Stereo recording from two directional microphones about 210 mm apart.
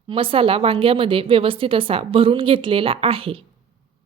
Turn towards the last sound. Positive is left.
turn(degrees=-25)  # may be behind; listen again after turning